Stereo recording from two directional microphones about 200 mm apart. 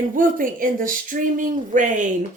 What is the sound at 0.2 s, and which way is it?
Speech, 45° right (ahead or behind).